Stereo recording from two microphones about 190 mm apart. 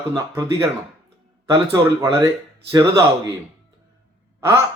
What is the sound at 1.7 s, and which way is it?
A man's voice, 15° right (ahead or behind).